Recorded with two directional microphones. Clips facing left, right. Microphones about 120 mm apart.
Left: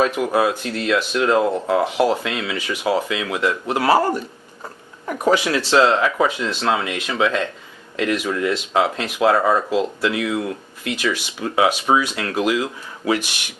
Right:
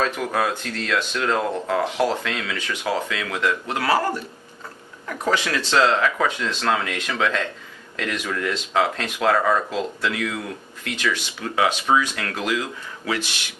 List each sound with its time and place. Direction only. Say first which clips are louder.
0.0 s speech: left 5 dB; 15° left (ahead or behind)
5.0 s speech: left 5 dB; 15° left (ahead or behind)